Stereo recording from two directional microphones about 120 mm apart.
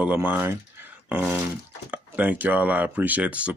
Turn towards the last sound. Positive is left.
turn(degrees=-10)  # may be behind; listen again after turning